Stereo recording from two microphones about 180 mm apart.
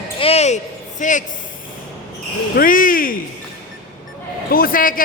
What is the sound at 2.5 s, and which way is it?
Speech, 50° left (ahead or behind).